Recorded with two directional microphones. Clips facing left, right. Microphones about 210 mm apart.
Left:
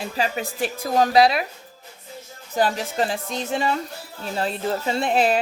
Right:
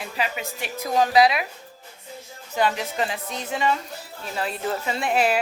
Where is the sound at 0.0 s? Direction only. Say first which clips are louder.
Left 3 dB; 30° left (ahead or behind).